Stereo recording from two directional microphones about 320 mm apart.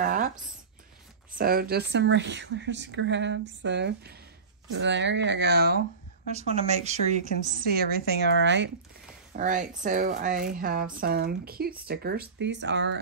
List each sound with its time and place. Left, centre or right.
0.0 s a sound: right
1.3 s speech: right
6.2 s speech: centre